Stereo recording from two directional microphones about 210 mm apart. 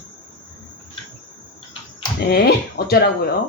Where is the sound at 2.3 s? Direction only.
50° left (ahead or behind).